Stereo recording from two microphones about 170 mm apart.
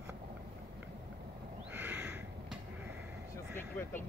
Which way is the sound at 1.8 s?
10° right (ahead or behind).